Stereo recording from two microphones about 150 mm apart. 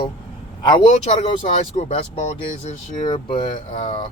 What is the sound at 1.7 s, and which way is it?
Speech, 45° left (ahead or behind).